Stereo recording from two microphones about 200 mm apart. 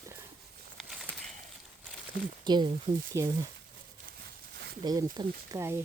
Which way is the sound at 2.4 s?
20° right (ahead or behind).